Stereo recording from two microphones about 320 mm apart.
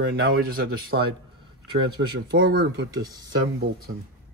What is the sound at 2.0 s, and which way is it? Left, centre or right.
Speech, right.